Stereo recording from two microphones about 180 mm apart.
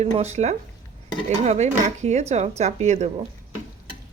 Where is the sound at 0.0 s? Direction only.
35° right (ahead or behind).